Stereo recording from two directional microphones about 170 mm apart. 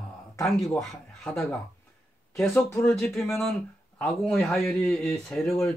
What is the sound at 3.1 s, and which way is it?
Speech, 15° left (ahead or behind).